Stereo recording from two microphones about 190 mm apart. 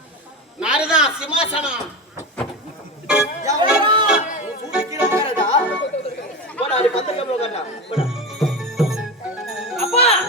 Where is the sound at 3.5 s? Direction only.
25° right (ahead or behind).